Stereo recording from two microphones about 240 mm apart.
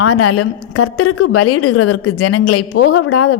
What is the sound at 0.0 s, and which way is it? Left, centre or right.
A woman's voice, left.